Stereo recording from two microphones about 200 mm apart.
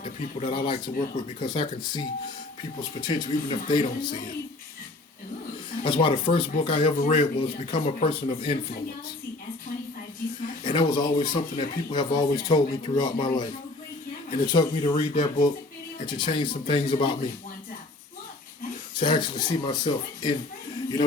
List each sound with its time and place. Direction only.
0.0 s speech: 25° left (ahead or behind)
5.8 s speech: 25° left (ahead or behind)
10.6 s speech: 20° left (ahead or behind)
18.9 s speech: 25° left (ahead or behind)